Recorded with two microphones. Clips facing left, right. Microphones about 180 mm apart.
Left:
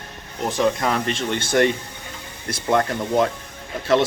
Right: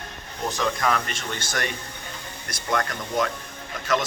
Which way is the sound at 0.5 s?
25° left (ahead or behind).